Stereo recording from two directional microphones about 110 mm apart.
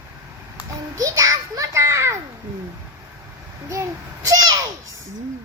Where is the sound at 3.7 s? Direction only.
30° right (ahead or behind).